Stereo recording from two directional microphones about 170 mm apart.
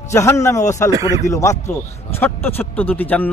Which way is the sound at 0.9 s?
20° right (ahead or behind).